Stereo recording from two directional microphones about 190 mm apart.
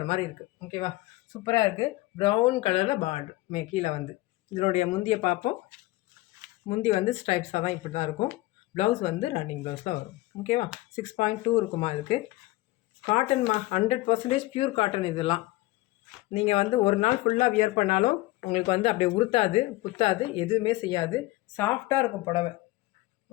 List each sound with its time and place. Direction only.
0.7 s speech: 25° left (ahead or behind)
6.7 s speech: 35° left (ahead or behind); by 22.0 s 10° left (ahead or behind)